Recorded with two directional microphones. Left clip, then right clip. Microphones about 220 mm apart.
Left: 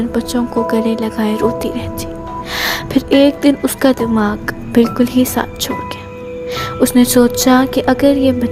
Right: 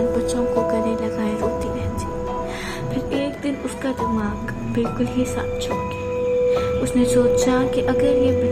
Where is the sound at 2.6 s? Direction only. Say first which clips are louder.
Left 10 dB; 50° left (ahead or behind).